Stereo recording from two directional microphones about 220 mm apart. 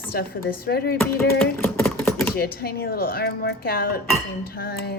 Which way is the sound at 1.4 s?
10° left (ahead or behind).